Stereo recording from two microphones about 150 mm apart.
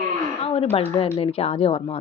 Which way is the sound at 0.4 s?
40° left (ahead or behind).